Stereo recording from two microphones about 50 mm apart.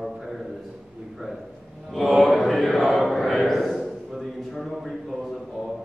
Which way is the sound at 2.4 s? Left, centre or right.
Centre.